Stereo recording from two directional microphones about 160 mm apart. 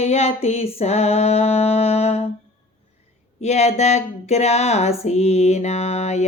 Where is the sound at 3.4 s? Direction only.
45° left (ahead or behind).